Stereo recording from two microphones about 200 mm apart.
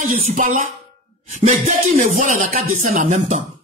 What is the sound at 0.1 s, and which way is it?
Speech, 40° right (ahead or behind).